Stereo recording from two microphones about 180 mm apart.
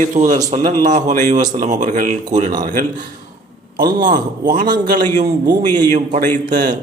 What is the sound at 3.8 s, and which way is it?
Speech, 25° right (ahead or behind).